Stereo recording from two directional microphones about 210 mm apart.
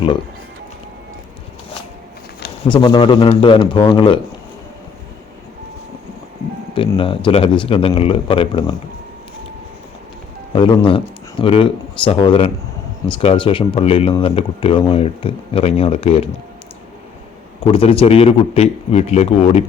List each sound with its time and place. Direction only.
2.6 s speech: 25° left (ahead or behind)
6.7 s speech: 25° left (ahead or behind)
10.5 s speech: 25° left (ahead or behind)
17.6 s speech: 25° left (ahead or behind)